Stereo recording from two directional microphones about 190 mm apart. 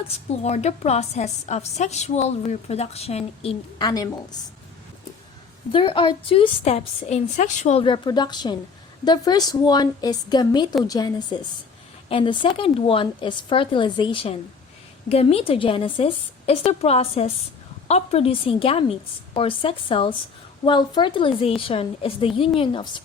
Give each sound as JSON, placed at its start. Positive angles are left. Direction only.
{"t": 0.4, "sound": "a woman's voice", "side_deg": 35}
{"t": 3.8, "sound": "a woman's voice", "side_deg": 20}
{"t": 5.7, "sound": "a woman's voice", "side_deg": 25}